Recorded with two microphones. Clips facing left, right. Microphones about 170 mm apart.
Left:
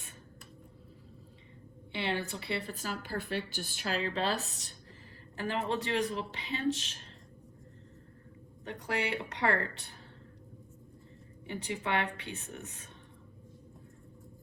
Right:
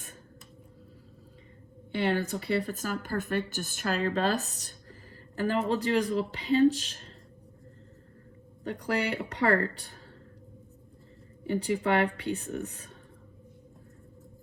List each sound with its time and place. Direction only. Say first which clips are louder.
1.9 s a woman's voice: right 7 dB; 45° right (ahead or behind)
8.6 s speech: right 5 dB; 40° right (ahead or behind)
11.4 s speech: right 9 dB; 40° right (ahead or behind)